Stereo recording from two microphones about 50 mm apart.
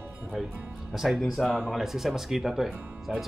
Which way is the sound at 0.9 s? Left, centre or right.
Centre.